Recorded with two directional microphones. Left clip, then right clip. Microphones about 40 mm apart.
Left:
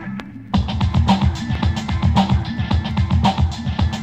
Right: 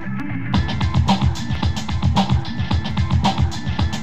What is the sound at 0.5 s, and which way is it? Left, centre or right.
Music, left.